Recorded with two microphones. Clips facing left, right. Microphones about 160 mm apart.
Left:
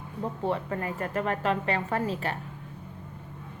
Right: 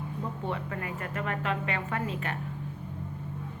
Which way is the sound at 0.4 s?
35° left (ahead or behind).